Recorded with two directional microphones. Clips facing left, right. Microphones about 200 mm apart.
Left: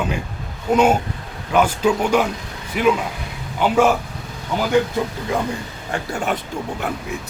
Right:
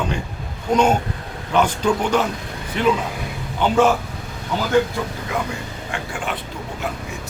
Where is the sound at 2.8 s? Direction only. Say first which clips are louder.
Left 1 dB; 5° left (ahead or behind).